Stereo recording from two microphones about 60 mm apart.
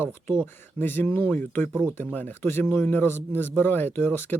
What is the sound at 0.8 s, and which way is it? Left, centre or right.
Speech, left.